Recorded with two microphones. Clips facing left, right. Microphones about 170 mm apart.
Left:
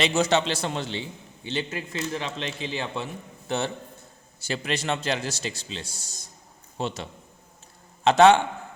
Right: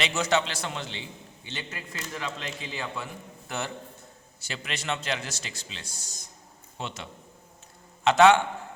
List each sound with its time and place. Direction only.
0.0 s a man's voice: 30° left (ahead or behind)
4.4 s a man's voice: 35° left (ahead or behind)